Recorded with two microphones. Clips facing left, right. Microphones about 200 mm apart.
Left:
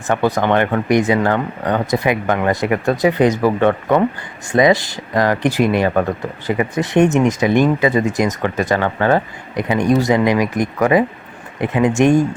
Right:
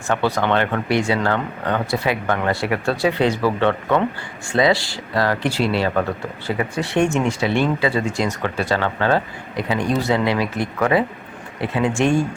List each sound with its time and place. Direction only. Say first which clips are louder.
0.1 s speech: left 3 dB; 15° left (ahead or behind)